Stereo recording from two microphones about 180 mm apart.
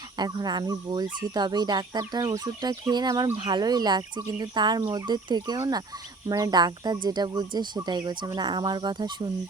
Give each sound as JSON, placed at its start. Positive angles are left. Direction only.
{"t": 0.2, "sound": "speech", "side_deg": -25}